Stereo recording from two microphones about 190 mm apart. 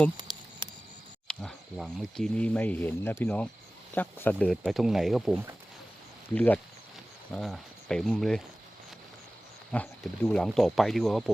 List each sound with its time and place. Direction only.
0.3 s a sound: 20° right (ahead or behind)
1.3 s speech: 5° left (ahead or behind)
9.7 s speech: 5° left (ahead or behind)